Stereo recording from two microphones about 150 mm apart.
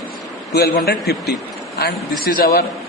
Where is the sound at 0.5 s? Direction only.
90° left.